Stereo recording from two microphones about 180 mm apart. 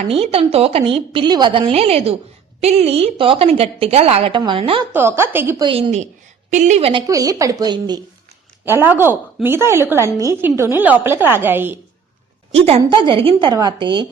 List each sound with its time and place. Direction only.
0.0 s a woman's voice: 35° right (ahead or behind)
4.9 s a woman's voice: 15° right (ahead or behind)
5.6 s a woman's voice: 35° right (ahead or behind)
7.1 s a woman's voice: 20° right (ahead or behind)
8.6 s a woman's voice: 10° right (ahead or behind)
12.5 s a woman's voice: 35° right (ahead or behind)